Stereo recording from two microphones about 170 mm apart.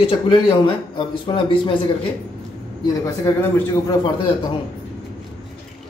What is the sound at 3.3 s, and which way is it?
Speech, 20° left (ahead or behind).